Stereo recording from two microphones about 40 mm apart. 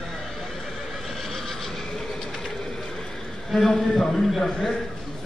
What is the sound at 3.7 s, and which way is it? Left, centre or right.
A man's voice, centre.